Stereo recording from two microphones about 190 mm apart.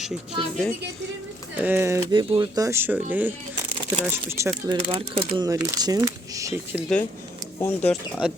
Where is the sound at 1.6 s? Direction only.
10° right (ahead or behind).